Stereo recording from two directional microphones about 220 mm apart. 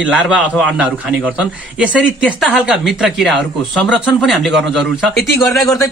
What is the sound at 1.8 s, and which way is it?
Speech, 5° right (ahead or behind).